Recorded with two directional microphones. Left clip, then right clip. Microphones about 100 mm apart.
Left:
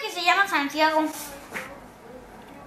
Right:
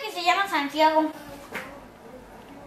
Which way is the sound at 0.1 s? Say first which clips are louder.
Left 2 dB; 10° left (ahead or behind).